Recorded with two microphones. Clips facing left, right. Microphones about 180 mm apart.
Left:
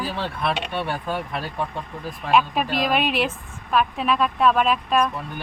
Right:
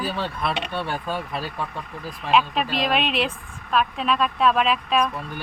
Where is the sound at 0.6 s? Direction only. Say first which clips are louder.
Left 1 dB; 15° left (ahead or behind).